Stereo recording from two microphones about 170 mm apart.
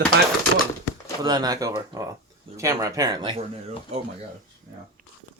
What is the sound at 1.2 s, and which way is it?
Speech, 20° right (ahead or behind).